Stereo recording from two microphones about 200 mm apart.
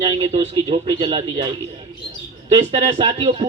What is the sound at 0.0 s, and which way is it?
A man's voice, 30° right (ahead or behind).